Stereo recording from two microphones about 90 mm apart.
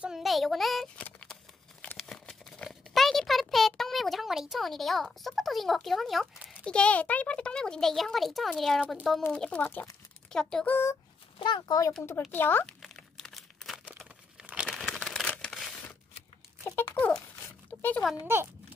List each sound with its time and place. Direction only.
0.0 s a child's voice: 5° right (ahead or behind)
0.9 s a sound: 15° left (ahead or behind); by 6.5 s centre (ahead or behind)
6.6 s a child's voice: 10° left (ahead or behind)
9.6 s speech: 20° left (ahead or behind)
10.3 s a child's voice: 10° left (ahead or behind)
11.3 s a child's voice: 55° left (ahead or behind)
12.3 s speech: 25° left (ahead or behind)
12.6 s crumpling: 5° left (ahead or behind)
14.4 s crumpling: 15° right (ahead or behind)
14.8 s crumpling: 5° left (ahead or behind)
16.6 s a sound: 15° left (ahead or behind)
17.6 s oink: 15° left (ahead or behind)
18.2 s speech: 25° right (ahead or behind)